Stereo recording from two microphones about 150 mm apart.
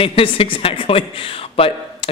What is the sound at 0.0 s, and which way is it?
A man's voice, 40° left (ahead or behind).